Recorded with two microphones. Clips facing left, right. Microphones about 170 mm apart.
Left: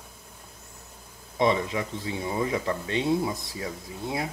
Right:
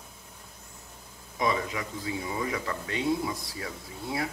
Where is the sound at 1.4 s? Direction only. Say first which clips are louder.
Left 5 dB; 25° left (ahead or behind).